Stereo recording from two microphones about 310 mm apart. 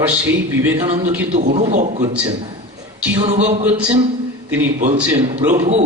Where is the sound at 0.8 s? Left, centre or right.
Centre.